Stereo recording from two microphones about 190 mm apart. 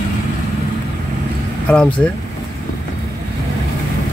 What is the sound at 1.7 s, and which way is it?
Speech, 5° left (ahead or behind).